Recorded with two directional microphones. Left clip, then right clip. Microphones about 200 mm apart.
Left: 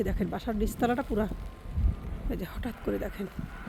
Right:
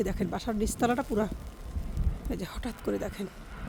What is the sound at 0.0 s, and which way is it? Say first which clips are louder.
Speech: right 1 dB; centre (ahead or behind).